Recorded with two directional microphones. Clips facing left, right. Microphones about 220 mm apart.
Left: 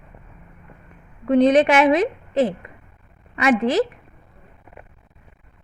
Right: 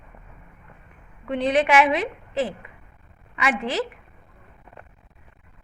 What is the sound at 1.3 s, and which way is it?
A woman's voice, 40° left (ahead or behind).